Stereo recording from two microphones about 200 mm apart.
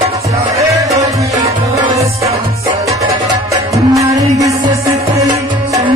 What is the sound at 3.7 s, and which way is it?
Music, 15° right (ahead or behind).